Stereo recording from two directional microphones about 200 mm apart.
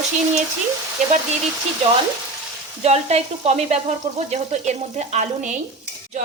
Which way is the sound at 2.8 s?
30° right (ahead or behind).